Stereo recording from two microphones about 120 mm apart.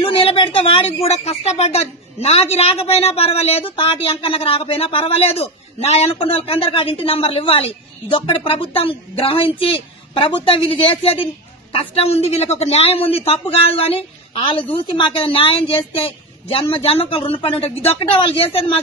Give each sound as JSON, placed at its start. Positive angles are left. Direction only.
{"t": 0.0, "sound": "speech", "side_deg": 50}